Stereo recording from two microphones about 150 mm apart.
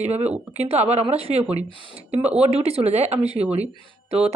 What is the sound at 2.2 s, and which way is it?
Speech, 10° right (ahead or behind).